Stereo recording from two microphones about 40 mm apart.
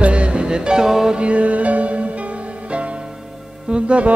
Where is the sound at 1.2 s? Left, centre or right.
Right.